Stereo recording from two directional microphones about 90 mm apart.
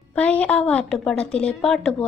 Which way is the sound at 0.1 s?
15° left (ahead or behind).